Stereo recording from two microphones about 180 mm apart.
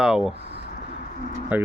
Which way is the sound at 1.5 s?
10° right (ahead or behind).